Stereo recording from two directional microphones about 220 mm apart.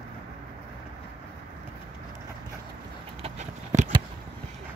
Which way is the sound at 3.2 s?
30° right (ahead or behind).